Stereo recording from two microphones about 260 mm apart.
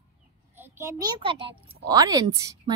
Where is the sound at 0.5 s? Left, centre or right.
Centre.